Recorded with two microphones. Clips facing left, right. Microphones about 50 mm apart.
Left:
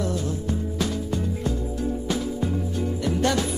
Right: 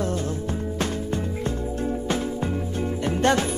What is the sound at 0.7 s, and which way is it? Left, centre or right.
Music, right.